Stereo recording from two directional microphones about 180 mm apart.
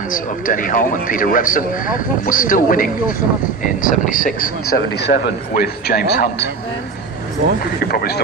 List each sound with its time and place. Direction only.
0.1 s a man's voice: 50° left (ahead or behind)
4.4 s speech: 60° left (ahead or behind)
7.6 s speech: 55° left (ahead or behind)